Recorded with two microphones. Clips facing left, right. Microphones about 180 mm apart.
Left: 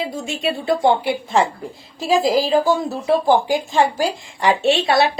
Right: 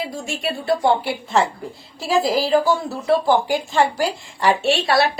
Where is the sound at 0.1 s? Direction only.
20° left (ahead or behind).